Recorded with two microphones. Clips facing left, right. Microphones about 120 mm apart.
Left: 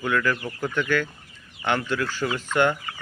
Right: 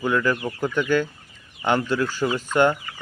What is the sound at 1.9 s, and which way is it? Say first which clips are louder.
Speech: right 3 dB; 20° right (ahead or behind).